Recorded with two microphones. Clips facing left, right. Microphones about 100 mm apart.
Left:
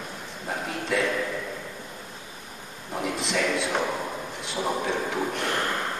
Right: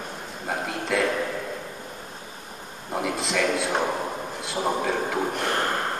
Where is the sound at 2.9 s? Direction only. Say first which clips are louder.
Right 2 dB; 45° right (ahead or behind).